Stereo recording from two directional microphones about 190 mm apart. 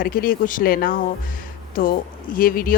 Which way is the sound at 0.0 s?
50° left (ahead or behind).